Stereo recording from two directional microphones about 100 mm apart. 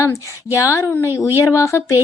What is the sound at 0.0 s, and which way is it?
A child's voice, 30° left (ahead or behind).